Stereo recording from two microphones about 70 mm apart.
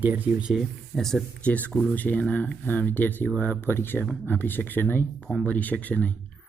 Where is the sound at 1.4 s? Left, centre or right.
Centre.